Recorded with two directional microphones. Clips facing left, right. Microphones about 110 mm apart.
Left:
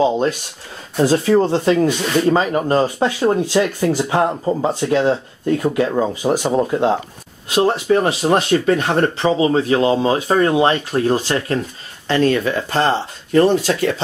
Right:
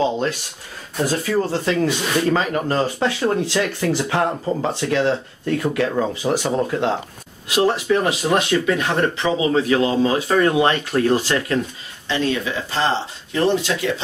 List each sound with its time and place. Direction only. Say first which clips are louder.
0.9 s speech: left 6 dB; 25° left (ahead or behind)
7.4 s speech: left 2 dB; 30° left (ahead or behind)
12.1 s speech: left 6 dB; 50° left (ahead or behind)